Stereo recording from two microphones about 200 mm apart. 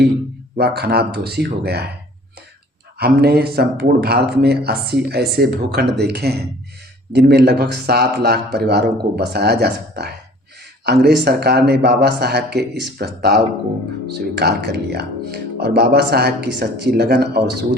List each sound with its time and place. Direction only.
0.5 s speech: 50° right (ahead or behind)
3.0 s speech: 55° right (ahead or behind)